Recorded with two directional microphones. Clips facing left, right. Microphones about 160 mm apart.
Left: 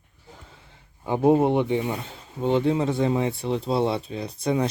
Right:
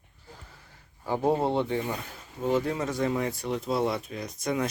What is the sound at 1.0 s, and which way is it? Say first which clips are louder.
A man's voice: left 6 dB; 20° left (ahead or behind).